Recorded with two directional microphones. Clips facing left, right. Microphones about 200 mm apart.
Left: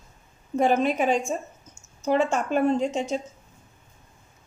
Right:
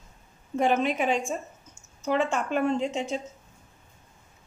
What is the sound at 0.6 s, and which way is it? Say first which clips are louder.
A woman's voice: left 3 dB; 40° left (ahead or behind).